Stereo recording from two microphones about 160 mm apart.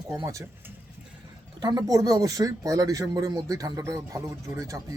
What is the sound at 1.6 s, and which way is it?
Speech, 20° right (ahead or behind).